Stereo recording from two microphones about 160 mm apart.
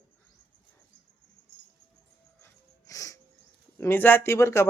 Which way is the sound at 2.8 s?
20° left (ahead or behind).